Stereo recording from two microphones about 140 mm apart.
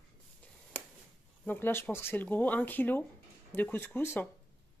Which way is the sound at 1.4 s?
15° left (ahead or behind).